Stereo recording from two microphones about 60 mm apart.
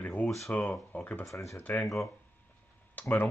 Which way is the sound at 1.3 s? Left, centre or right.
Left.